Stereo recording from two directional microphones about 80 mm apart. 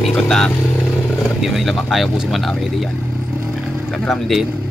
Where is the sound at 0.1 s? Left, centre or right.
Centre.